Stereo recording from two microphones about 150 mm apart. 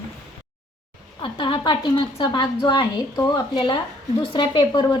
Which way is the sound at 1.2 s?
35° left (ahead or behind).